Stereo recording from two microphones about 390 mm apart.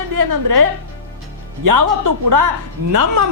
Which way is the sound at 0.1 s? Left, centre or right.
Right.